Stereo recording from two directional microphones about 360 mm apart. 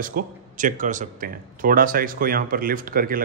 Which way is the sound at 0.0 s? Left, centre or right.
Right.